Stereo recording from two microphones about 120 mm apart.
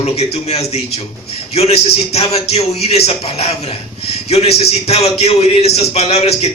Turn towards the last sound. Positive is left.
turn(degrees=60)  # may be behind; listen again after turning